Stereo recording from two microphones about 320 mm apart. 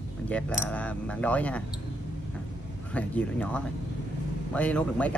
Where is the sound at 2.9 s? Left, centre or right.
Centre.